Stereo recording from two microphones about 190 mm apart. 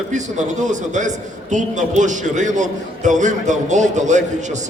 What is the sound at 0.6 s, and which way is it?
A man's voice, 40° right (ahead or behind).